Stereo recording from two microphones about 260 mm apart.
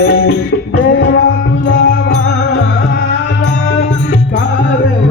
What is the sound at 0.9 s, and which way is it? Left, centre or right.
Music, left.